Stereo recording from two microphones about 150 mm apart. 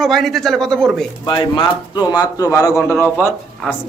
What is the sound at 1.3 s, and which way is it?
A man's voice, 35° left (ahead or behind).